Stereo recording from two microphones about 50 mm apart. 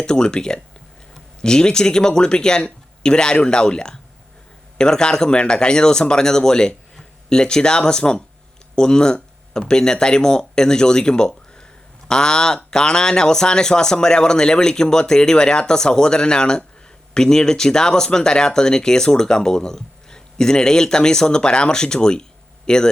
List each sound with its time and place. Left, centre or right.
0.0 s speech: centre